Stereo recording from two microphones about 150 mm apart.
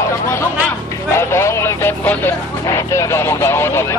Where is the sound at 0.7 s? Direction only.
15° left (ahead or behind).